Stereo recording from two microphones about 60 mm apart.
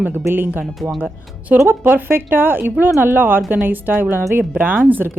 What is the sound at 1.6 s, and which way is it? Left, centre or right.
Speech, right.